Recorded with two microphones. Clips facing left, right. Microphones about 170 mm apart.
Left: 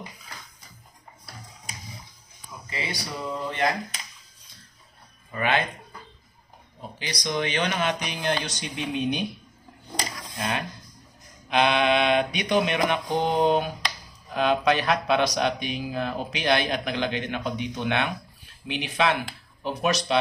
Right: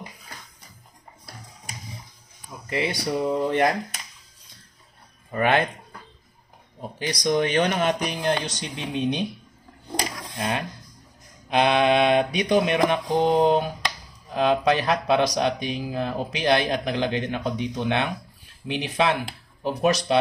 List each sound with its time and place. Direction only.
2.7 s speech: 60° right (ahead or behind)
5.3 s speech: 50° right (ahead or behind)
7.0 s speech: 50° right (ahead or behind); by 9.2 s 30° right (ahead or behind)
11.4 s speech: 40° right (ahead or behind)